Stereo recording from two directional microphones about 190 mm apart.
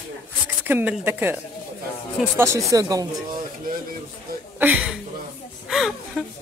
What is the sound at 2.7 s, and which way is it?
Speech, 20° right (ahead or behind).